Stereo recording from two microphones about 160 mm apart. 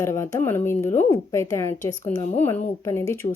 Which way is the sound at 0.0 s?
15° left (ahead or behind).